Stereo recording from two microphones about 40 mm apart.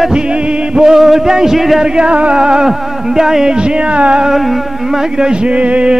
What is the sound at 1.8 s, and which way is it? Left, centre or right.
Music, right.